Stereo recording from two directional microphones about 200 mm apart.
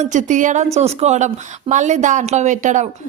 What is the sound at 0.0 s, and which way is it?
A man's voice, 40° right (ahead or behind).